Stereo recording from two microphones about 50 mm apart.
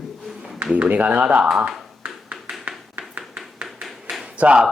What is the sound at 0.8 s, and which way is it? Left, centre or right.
Speech, right.